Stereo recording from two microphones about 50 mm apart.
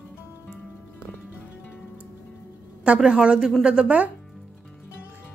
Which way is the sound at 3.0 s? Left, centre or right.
Centre.